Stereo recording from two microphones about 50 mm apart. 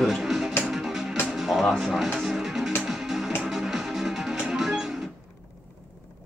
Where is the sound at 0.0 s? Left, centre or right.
Centre.